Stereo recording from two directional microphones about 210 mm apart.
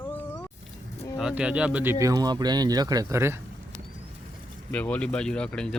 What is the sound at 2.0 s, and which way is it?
Speech, 20° right (ahead or behind).